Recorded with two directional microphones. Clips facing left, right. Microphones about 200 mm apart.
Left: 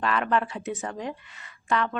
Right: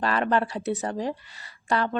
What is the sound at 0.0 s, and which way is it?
Speech, 35° right (ahead or behind).